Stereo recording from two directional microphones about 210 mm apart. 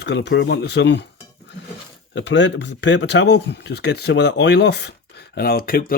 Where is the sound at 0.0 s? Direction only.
55° left (ahead or behind).